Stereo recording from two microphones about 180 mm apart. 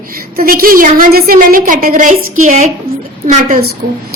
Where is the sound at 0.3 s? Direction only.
55° right (ahead or behind).